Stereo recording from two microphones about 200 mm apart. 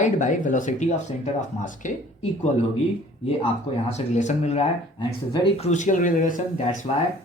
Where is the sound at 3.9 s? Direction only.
35° left (ahead or behind).